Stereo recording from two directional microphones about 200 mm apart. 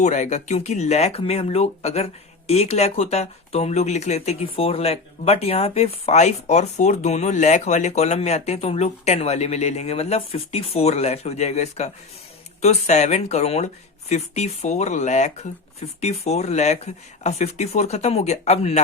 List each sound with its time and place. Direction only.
0.0 s speech: 35° left (ahead or behind)